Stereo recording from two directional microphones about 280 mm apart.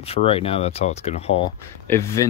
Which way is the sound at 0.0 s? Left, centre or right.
Left.